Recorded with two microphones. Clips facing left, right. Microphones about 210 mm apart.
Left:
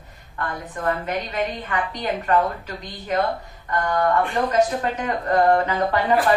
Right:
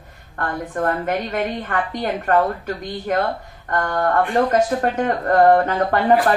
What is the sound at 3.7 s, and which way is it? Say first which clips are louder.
A woman's voice: right 1 dB; 50° right (ahead or behind).